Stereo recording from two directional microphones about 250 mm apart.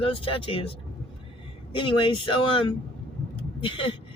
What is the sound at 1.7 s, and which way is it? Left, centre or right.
Speech, centre.